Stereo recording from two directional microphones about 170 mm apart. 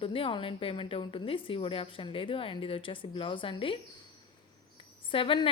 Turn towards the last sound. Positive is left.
turn(degrees=30)  # may be behind; listen again after turning